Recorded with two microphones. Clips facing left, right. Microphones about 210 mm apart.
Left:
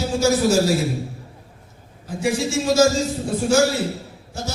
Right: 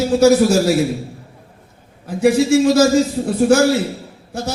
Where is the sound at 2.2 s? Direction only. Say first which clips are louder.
Right 9 dB; 60° right (ahead or behind).